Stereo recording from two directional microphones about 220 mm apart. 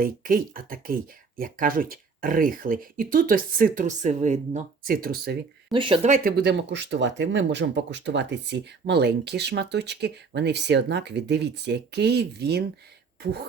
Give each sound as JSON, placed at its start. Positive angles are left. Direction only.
{"t": 0.0, "sound": "speech", "side_deg": -40}
{"t": 5.7, "sound": "speech", "side_deg": -25}